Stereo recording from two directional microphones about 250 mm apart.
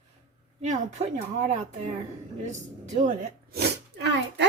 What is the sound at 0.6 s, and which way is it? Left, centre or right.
Speech, right.